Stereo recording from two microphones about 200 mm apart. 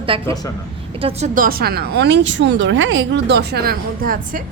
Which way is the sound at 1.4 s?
45° right (ahead or behind).